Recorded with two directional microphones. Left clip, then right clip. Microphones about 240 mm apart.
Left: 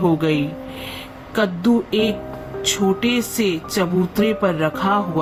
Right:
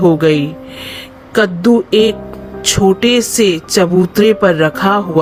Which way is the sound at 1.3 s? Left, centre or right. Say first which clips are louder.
Right 8 dB; right.